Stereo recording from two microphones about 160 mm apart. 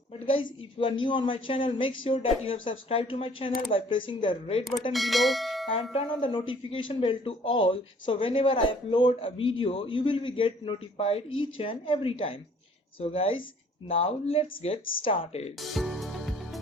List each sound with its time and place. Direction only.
0.1 s speech: 35° left (ahead or behind)
4.9 s speech: centre (ahead or behind)
5.9 s speech: 35° left (ahead or behind)
15.5 s music: centre (ahead or behind)